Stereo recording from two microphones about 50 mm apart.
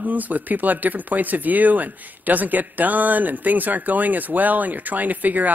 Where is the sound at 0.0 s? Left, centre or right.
Right.